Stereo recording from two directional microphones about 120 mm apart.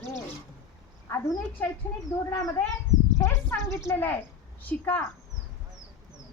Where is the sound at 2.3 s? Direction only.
30° left (ahead or behind).